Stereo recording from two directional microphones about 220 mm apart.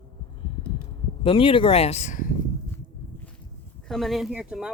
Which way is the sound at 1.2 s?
25° left (ahead or behind).